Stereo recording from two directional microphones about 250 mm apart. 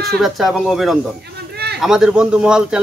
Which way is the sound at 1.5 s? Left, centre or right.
Right.